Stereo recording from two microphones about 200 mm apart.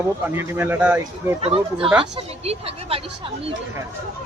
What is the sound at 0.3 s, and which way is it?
Speech, 10° right (ahead or behind).